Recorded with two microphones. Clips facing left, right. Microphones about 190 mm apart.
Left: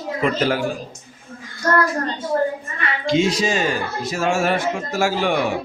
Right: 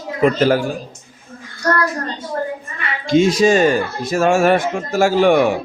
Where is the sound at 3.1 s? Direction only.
50° right (ahead or behind).